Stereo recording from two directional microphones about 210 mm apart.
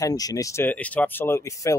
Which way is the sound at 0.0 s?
15° left (ahead or behind).